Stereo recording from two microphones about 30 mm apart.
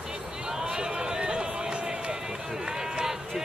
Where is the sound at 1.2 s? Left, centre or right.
Right.